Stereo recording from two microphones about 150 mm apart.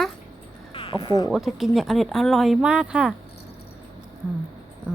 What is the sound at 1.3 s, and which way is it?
A woman's voice, centre (ahead or behind).